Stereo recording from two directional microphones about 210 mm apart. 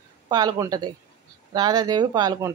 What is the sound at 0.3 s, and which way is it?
Speech, 20° right (ahead or behind).